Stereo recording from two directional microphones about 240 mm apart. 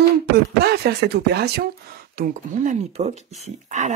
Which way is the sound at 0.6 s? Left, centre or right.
Right.